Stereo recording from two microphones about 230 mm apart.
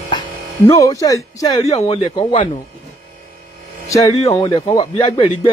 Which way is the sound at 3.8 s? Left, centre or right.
Centre.